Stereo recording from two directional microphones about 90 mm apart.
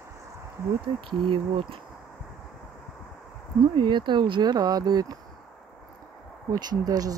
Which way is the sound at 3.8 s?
60° right (ahead or behind).